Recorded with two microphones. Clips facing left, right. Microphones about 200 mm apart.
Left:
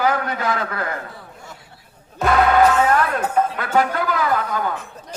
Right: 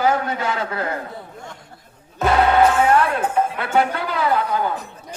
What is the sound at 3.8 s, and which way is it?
A woman's voice, 25° right (ahead or behind).